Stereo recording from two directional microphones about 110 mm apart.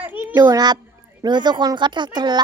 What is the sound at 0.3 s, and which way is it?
Speech, 35° right (ahead or behind).